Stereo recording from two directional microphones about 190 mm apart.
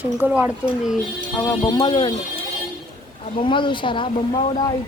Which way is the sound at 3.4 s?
25° left (ahead or behind).